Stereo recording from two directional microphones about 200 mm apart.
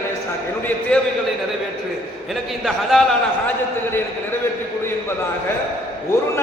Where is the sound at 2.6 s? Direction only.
Centre (ahead or behind).